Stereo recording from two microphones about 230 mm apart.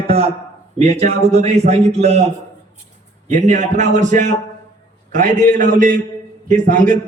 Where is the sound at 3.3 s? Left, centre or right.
Right.